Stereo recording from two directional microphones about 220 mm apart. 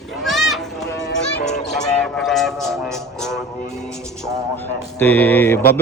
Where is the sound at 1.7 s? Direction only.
5° left (ahead or behind).